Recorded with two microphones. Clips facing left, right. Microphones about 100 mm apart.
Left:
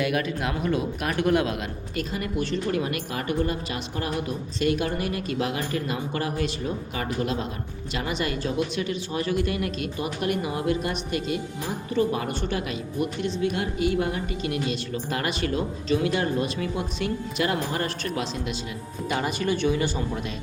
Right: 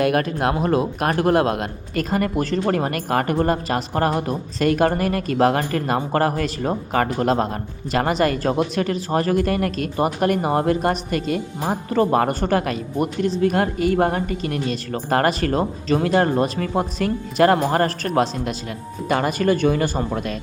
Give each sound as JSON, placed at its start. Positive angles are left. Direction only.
{"t": 0.0, "sound": "speech", "side_deg": -45}